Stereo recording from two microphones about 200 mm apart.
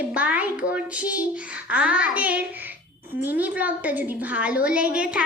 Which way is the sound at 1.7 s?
5° right (ahead or behind).